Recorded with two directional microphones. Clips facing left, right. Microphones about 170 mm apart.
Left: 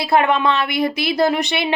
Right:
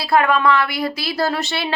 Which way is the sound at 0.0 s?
20° left (ahead or behind).